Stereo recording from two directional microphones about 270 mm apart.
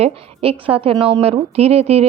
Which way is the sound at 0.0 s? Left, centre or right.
Right.